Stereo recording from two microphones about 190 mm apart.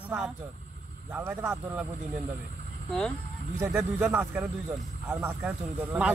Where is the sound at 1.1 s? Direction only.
10° right (ahead or behind).